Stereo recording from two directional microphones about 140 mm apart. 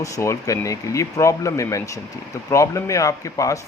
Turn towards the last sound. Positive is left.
turn(degrees=25)  # may be behind; listen again after turning